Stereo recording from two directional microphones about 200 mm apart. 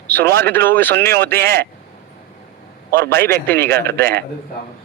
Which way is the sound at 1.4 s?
50° right (ahead or behind).